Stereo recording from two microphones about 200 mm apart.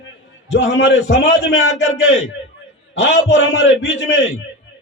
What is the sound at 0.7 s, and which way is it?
A man's voice, 65° left (ahead or behind).